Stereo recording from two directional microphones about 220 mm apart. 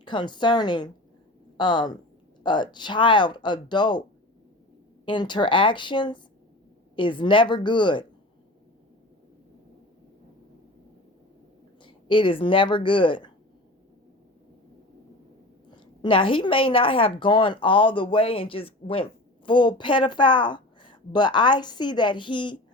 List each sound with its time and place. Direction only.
0.0 s a woman's voice: 20° left (ahead or behind)
5.0 s a woman's voice: 20° left (ahead or behind)
11.8 s a woman's voice: 20° left (ahead or behind)
15.7 s a woman's voice: 20° left (ahead or behind)